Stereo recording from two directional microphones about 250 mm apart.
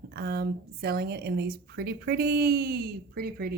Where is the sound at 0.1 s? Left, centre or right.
Right.